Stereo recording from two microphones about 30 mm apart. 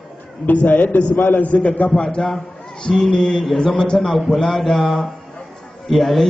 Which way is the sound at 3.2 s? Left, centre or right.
Centre.